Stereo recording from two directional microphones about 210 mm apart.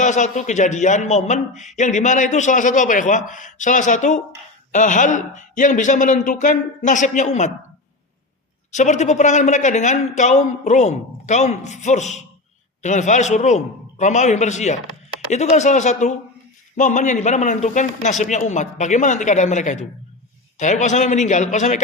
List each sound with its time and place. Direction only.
0.0 s a man's voice: 35° left (ahead or behind)
8.7 s a man's voice: 35° left (ahead or behind)